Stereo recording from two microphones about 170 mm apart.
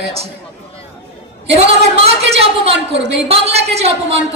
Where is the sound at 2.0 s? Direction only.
35° right (ahead or behind).